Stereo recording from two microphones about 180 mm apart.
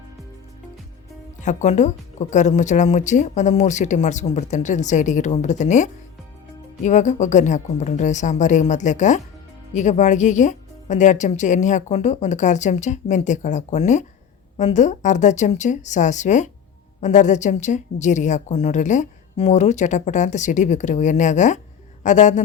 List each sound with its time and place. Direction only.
1.5 s a woman's voice: 40° left (ahead or behind)